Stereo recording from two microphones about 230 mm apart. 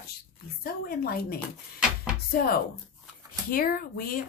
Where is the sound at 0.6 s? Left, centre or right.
Left.